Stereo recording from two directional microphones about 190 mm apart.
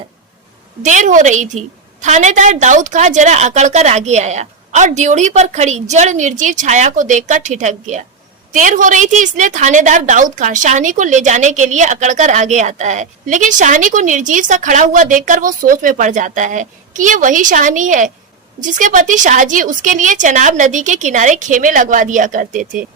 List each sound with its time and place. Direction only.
0.9 s a woman's voice: 40° right (ahead or behind)